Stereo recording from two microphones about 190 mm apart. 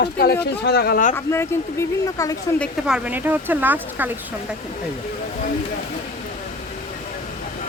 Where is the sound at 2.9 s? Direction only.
10° right (ahead or behind).